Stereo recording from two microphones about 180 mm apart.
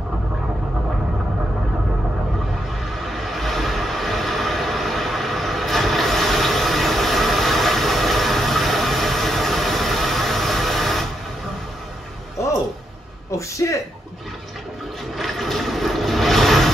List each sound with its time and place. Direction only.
3.0 s vehicle: centre (ahead or behind)
13.3 s a sound: 15° left (ahead or behind)
15.1 s vehicle: centre (ahead or behind)